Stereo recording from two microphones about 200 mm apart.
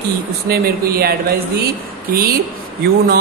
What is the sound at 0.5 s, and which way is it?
Speech, 50° right (ahead or behind).